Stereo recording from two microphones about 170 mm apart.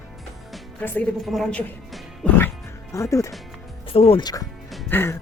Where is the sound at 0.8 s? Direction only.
10° left (ahead or behind).